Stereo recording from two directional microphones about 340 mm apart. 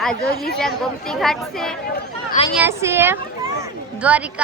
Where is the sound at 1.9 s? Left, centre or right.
Left.